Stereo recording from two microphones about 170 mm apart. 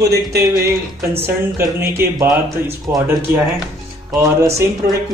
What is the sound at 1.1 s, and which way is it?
Speech, 15° right (ahead or behind).